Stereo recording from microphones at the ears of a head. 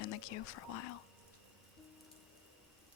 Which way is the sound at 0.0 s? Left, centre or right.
Left.